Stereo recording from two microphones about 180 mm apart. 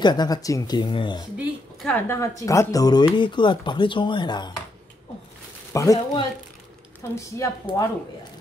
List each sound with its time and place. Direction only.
0.0 s speech: 25° left (ahead or behind)
1.2 s speech: 5° right (ahead or behind)
2.0 s speech: 15° left (ahead or behind)
5.7 s speech: 15° left (ahead or behind)
7.2 s a woman's voice: 15° left (ahead or behind)